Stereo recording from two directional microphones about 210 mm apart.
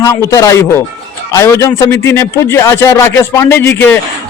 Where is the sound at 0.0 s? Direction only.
15° left (ahead or behind).